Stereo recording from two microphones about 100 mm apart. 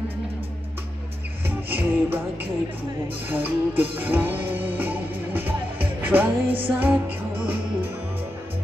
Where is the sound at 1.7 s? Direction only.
20° right (ahead or behind).